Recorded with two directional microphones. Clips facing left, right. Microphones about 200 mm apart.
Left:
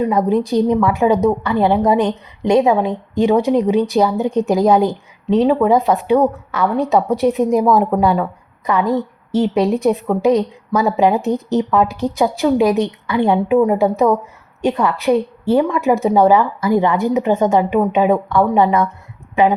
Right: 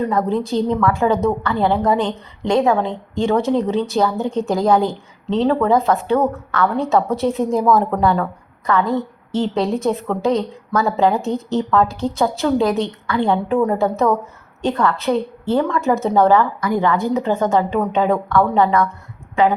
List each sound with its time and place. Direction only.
0.0 s a woman's voice: 15° left (ahead or behind)
16.6 s a woman's voice: 20° left (ahead or behind)